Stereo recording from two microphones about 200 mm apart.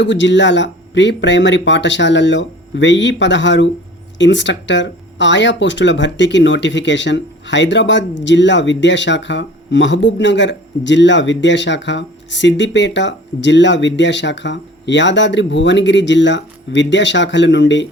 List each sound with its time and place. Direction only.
0.0 s speech: 65° left (ahead or behind)